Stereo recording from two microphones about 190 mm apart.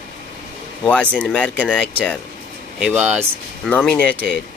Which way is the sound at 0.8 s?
5° left (ahead or behind).